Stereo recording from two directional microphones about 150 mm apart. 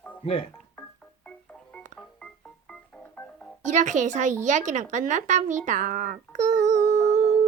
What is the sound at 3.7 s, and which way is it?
Speech, 55° right (ahead or behind).